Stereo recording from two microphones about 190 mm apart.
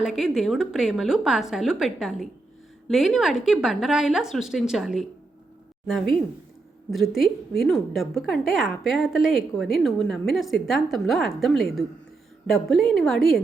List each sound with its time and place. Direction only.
0.0 s a woman's voice: centre (ahead or behind)
6.9 s a woman's voice: centre (ahead or behind)